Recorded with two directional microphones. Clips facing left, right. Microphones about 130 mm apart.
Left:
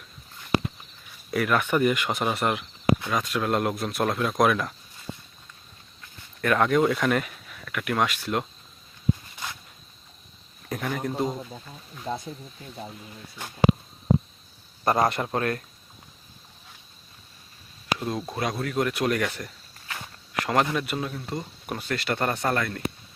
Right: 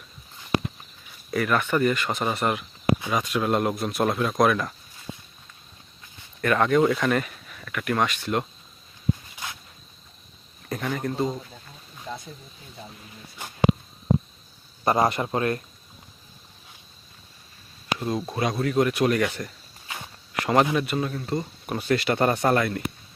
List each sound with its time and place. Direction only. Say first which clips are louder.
1.3 s speech: even; centre (ahead or behind)
6.4 s speech: right 1 dB; centre (ahead or behind)
9.3 s a sound: even; 5° right (ahead or behind)
10.7 s speech: right 1 dB; centre (ahead or behind)
12.1 s speech: left 5 dB; 35° left (ahead or behind)
14.8 s speech: right 1 dB; centre (ahead or behind)
17.9 s speech: right 2 dB; centre (ahead or behind)